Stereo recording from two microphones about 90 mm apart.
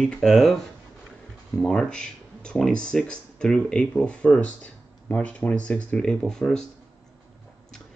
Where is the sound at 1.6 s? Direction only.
10° left (ahead or behind).